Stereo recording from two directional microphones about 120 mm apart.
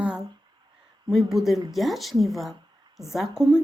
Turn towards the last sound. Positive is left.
turn(degrees=0)  # may be behind; listen again after turning